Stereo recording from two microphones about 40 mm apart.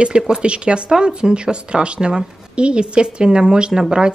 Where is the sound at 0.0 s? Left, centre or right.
Right.